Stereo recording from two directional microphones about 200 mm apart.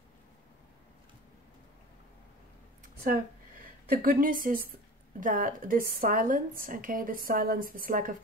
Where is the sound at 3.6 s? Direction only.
45° right (ahead or behind).